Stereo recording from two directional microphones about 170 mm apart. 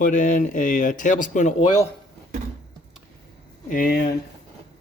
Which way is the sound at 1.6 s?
25° left (ahead or behind).